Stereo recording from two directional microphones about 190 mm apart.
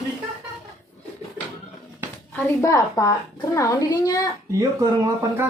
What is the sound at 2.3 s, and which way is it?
A woman's voice, 15° left (ahead or behind).